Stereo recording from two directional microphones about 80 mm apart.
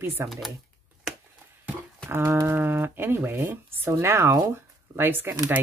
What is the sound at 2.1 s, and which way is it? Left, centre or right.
Speech, right.